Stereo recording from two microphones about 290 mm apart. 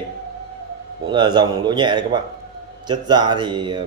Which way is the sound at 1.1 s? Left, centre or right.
Centre.